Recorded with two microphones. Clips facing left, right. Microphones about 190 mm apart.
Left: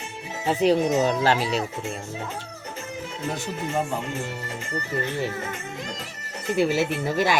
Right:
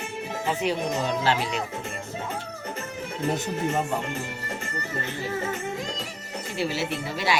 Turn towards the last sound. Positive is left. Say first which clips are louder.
# left 4 dB
turn(degrees=50)  # may be behind; listen again after turning